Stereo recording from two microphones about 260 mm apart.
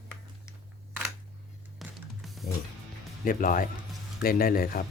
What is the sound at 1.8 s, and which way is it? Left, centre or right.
Music, centre.